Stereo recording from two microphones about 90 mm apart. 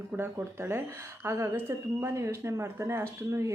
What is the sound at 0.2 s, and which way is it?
Speech, 30° right (ahead or behind).